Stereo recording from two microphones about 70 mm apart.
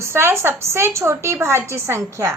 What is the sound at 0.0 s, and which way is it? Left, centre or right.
A woman's voice, right.